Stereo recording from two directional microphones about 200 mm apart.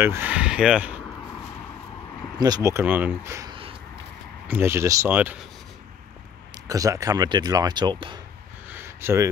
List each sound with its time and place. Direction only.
0.0 s speech: 10° right (ahead or behind)
2.3 s speech: 20° right (ahead or behind)
6.7 s speech: 15° right (ahead or behind)
8.6 s a sound: 10° right (ahead or behind)